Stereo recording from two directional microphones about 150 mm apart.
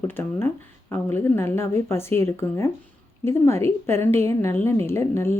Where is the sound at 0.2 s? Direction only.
15° left (ahead or behind).